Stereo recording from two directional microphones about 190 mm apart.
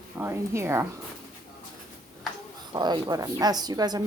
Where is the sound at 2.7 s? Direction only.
20° right (ahead or behind).